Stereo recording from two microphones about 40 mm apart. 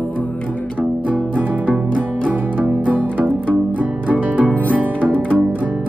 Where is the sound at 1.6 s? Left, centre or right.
Right.